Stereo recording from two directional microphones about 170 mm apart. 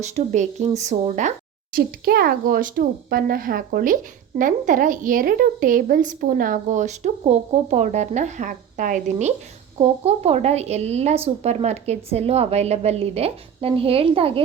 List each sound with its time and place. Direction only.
0.0 s a woman's voice: 45° right (ahead or behind)
1.7 s a woman's voice: 65° right (ahead or behind); by 14.4 s 35° right (ahead or behind)